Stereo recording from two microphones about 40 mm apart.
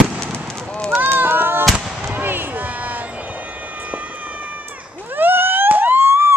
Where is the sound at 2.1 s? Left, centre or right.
Right.